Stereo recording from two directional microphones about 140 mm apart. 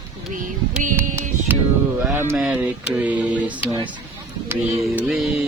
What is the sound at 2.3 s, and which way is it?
Speech, 5° right (ahead or behind).